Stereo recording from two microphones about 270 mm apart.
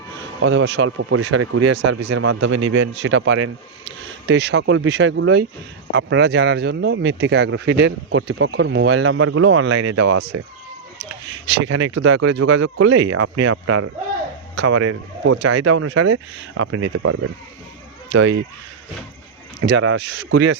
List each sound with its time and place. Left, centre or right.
0.4 s speech: right
2.1 s speech: right
2.6 s speech: right
2.8 s speech: right
10.2 s speech: right
11.8 s speech: right
15.7 s speech: right
19.6 s speech: right